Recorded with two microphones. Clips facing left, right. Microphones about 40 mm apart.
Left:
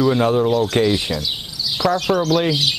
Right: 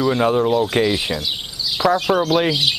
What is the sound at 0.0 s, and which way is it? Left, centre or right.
Speech, centre.